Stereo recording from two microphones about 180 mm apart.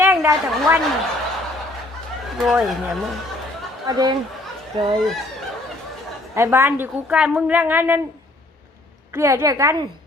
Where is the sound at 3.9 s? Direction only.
20° right (ahead or behind).